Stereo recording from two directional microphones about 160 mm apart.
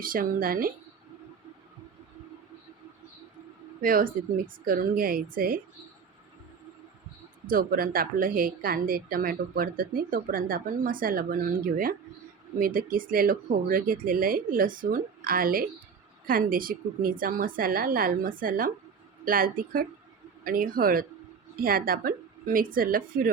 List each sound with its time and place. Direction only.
0.0 s a woman's voice: 60° right (ahead or behind)
3.8 s a woman's voice: 60° right (ahead or behind)
7.4 s a woman's voice: 60° right (ahead or behind)